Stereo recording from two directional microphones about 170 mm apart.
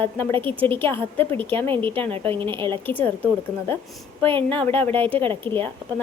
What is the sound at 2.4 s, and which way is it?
Speech, 30° right (ahead or behind).